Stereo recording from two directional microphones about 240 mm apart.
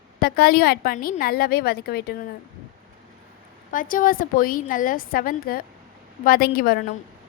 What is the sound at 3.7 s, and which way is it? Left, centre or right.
A woman's voice, left.